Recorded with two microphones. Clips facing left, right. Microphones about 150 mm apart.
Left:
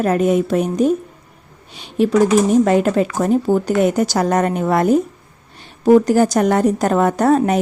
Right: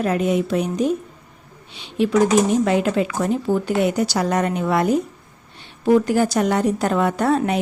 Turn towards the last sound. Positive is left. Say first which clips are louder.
# left 4 dB
turn(degrees=45)  # may be behind; listen again after turning